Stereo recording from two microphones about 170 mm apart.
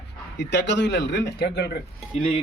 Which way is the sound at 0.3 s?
90° left.